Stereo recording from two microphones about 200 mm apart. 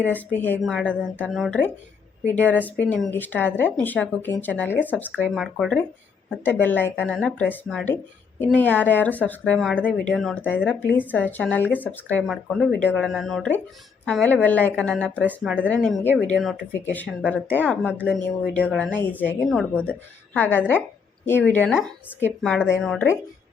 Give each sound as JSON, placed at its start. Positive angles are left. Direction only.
{"t": 0.0, "sound": "speech", "side_deg": 10}
{"t": 15.3, "sound": "speech", "side_deg": -10}
{"t": 15.6, "sound": "speech", "side_deg": 5}